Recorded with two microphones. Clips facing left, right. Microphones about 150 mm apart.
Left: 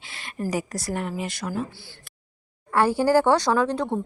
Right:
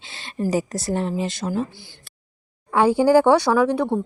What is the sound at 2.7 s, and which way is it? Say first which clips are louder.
A woman's voice: right 4 dB; 15° right (ahead or behind).